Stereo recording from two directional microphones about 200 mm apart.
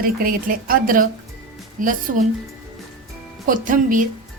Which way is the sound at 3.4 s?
40° right (ahead or behind).